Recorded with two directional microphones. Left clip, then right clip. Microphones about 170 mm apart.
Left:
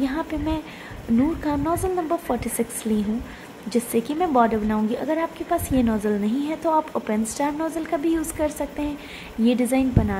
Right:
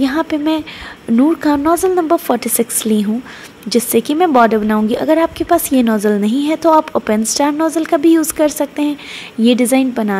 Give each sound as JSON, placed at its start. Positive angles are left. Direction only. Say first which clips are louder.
{"t": 0.0, "sound": "a woman's voice", "louder": "right 10 dB", "side_deg": -35}